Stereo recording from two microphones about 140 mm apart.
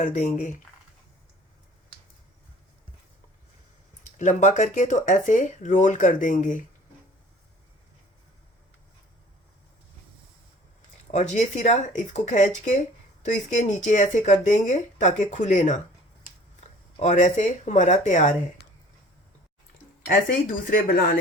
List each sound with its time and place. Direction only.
0.0 s speech: 65° left (ahead or behind)
4.0 s speech: 60° left (ahead or behind)
11.3 s speech: 60° left (ahead or behind)
17.0 s speech: 55° left (ahead or behind)
20.1 s speech: 85° left